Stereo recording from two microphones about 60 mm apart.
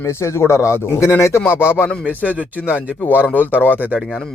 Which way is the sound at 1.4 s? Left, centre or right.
Left.